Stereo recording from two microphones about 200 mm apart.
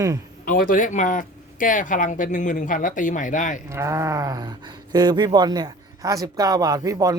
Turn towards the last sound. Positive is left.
turn(degrees=-15)  # may be behind; listen again after turning